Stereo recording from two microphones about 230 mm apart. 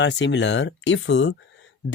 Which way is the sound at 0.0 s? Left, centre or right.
Left.